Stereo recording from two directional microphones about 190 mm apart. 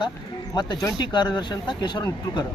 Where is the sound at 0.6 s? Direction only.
20° left (ahead or behind).